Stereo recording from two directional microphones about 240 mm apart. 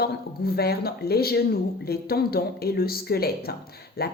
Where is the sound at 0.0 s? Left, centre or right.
Left.